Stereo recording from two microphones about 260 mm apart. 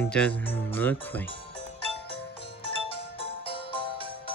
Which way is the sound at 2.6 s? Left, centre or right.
Left.